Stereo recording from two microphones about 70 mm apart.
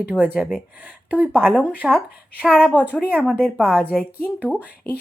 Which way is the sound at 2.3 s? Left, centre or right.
Centre.